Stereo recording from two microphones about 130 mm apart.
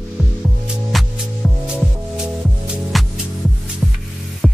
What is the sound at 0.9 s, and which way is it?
Music, centre (ahead or behind).